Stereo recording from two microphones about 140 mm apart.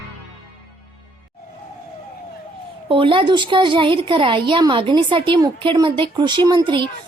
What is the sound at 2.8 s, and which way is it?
A woman's voice, 35° right (ahead or behind).